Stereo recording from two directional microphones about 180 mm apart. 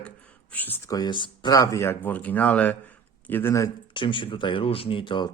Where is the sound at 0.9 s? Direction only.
25° left (ahead or behind).